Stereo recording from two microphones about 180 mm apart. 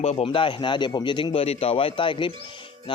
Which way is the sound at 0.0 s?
35° left (ahead or behind).